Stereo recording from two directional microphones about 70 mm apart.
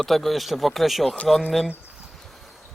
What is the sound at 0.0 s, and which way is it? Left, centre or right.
Speech, centre.